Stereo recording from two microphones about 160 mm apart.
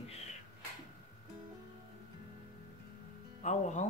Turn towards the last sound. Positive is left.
turn(degrees=50)  # may be behind; listen again after turning